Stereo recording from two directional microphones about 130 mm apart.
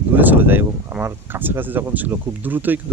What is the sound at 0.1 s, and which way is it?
Speech, 15° right (ahead or behind).